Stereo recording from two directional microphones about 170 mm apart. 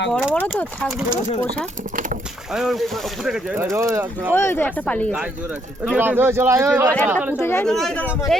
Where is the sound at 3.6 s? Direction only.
15° right (ahead or behind).